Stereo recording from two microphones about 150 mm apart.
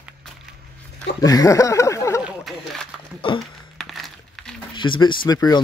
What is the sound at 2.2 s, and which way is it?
Speech, centre (ahead or behind).